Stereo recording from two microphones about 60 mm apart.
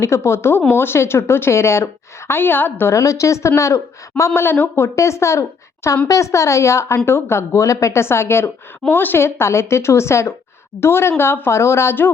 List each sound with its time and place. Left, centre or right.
0.0 s a woman's voice: left
2.9 s speech: left
4.4 s speech: left
4.9 s a woman's voice: left
8.9 s a woman's voice: left